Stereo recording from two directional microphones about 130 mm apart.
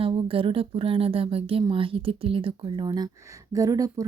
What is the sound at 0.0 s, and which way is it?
Speech, 40° right (ahead or behind).